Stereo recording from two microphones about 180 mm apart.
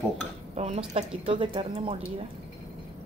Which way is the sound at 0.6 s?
35° right (ahead or behind).